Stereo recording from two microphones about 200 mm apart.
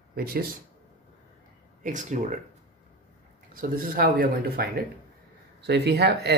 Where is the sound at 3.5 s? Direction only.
45° right (ahead or behind).